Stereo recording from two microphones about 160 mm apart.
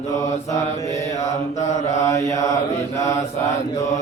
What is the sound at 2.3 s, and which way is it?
Mantra, 20° left (ahead or behind).